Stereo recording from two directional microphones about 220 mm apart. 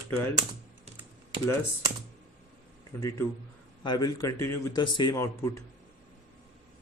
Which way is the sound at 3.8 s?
20° left (ahead or behind).